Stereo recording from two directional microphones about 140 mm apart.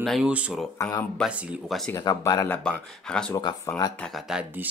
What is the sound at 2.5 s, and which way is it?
Speech, 5° left (ahead or behind).